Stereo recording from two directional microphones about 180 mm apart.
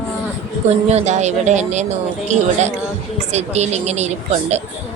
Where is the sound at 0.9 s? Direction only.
40° right (ahead or behind).